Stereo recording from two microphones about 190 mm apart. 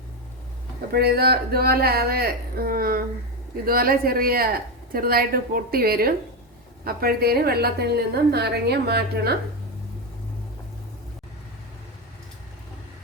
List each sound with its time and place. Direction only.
0.9 s a woman's voice: 55° right (ahead or behind)